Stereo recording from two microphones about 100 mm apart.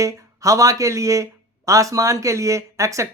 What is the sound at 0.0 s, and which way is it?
Speech, 35° right (ahead or behind).